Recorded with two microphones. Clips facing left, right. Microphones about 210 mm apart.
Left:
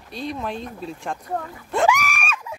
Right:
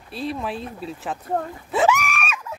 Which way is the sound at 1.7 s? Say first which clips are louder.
Even; 5° right (ahead or behind).